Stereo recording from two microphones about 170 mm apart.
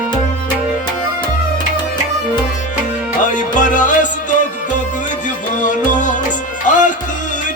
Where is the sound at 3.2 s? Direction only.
45° left (ahead or behind).